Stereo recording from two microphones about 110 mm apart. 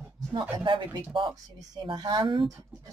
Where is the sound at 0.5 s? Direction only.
45° right (ahead or behind).